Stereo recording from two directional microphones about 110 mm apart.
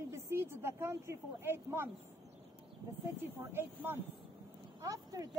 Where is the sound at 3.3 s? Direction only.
20° right (ahead or behind).